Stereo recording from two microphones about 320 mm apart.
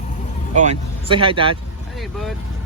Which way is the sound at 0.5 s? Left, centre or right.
Right.